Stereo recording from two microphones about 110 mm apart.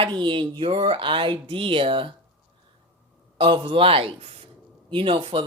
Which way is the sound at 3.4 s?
55° right (ahead or behind).